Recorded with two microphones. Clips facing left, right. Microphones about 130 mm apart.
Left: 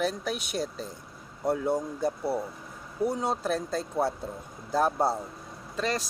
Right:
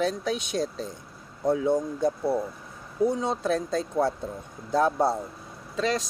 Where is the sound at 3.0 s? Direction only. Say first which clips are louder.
Right 3 dB; 10° left (ahead or behind).